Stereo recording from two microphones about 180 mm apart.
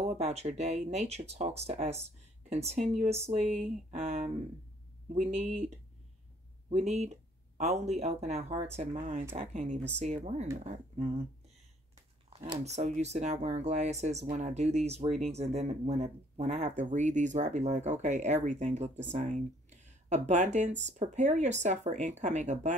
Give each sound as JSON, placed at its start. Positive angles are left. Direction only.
{"t": 0.1, "sound": "speech", "side_deg": -35}
{"t": 12.6, "sound": "speech", "side_deg": -40}